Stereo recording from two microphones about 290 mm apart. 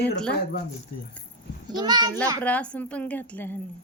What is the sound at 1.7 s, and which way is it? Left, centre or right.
Speech, centre.